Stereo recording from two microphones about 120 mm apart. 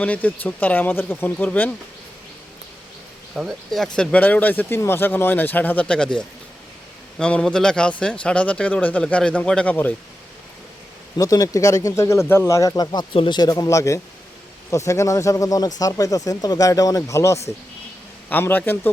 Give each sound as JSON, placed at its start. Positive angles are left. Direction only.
{"t": 0.0, "sound": "speech", "side_deg": 10}
{"t": 3.3, "sound": "speech", "side_deg": 0}
{"t": 11.2, "sound": "speech", "side_deg": 30}